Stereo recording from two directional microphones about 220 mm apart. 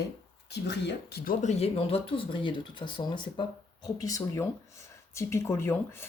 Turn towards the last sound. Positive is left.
turn(degrees=10)  # may be behind; listen again after turning